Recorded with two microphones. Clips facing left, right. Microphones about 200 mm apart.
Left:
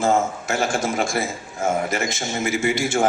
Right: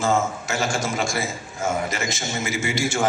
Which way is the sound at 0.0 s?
55° left (ahead or behind).